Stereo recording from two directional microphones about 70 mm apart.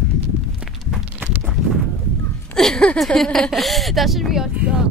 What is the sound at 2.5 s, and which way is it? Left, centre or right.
Speech, centre.